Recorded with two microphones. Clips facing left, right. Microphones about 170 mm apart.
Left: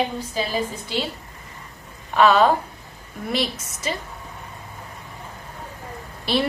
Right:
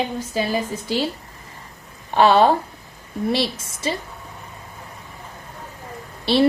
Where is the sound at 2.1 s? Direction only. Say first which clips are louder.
Right 2 dB; 30° right (ahead or behind).